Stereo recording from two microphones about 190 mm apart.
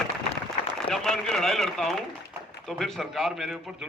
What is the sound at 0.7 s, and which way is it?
A man's voice, centre (ahead or behind).